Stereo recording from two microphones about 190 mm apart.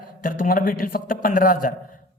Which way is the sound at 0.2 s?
45° left (ahead or behind).